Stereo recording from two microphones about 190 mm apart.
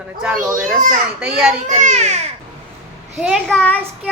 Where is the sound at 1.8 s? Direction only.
35° right (ahead or behind).